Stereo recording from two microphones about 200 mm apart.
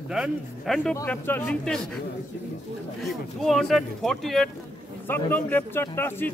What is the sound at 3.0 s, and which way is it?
Speech, centre (ahead or behind).